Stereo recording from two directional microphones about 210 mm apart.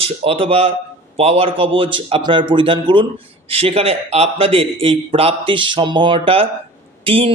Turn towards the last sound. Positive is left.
turn(degrees=-25)  # may be behind; listen again after turning